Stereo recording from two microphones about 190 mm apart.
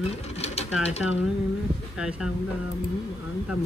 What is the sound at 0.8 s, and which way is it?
Speech, 35° left (ahead or behind).